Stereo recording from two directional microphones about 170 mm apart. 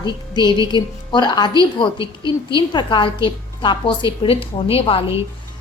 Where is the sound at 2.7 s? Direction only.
25° left (ahead or behind).